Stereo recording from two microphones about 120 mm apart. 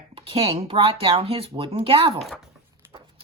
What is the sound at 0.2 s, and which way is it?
Speech, 50° right (ahead or behind).